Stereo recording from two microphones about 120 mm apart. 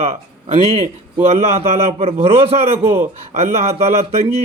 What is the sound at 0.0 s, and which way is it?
A man's voice, 60° right (ahead or behind).